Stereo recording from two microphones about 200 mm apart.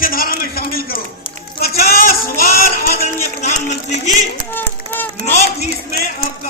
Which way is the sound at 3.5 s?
40° left (ahead or behind).